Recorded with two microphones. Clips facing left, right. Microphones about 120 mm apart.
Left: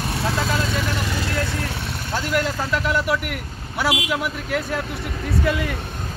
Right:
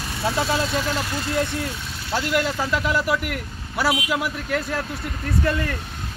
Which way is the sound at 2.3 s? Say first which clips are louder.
Left 1 dB; centre (ahead or behind).